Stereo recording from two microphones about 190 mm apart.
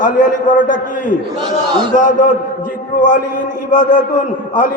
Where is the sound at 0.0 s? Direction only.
45° left (ahead or behind).